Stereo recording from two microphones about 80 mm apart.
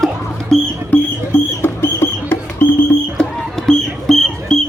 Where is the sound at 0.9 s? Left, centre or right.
Left.